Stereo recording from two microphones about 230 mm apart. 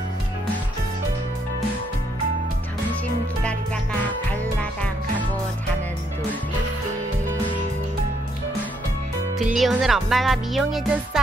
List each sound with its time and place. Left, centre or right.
9.5 s speech: centre